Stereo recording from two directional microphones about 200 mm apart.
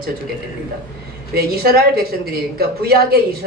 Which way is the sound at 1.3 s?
50° right (ahead or behind).